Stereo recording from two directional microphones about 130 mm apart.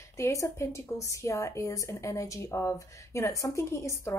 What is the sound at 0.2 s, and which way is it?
A woman's voice, 20° left (ahead or behind).